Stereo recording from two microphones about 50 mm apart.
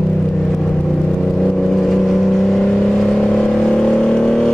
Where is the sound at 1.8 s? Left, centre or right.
Centre.